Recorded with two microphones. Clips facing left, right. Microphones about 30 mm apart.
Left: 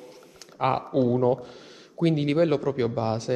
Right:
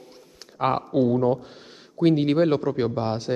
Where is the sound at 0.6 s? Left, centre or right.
Centre.